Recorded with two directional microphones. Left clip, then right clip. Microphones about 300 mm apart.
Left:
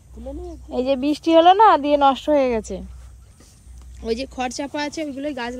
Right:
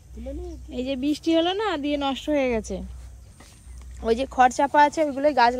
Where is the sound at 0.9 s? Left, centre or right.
Centre.